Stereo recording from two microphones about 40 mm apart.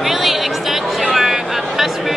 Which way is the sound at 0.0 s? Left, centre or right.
Centre.